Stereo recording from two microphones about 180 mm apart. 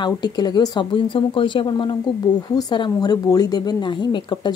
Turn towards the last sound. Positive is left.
turn(degrees=25)  # may be behind; listen again after turning